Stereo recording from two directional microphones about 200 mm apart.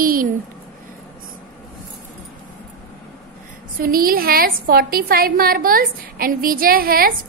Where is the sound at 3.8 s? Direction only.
45° right (ahead or behind).